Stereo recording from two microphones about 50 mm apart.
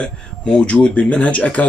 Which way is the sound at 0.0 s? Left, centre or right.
Left.